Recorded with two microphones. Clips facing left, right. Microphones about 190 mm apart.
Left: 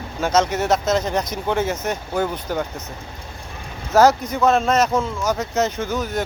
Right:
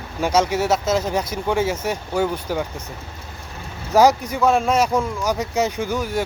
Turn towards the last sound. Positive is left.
turn(degrees=-10)  # may be behind; listen again after turning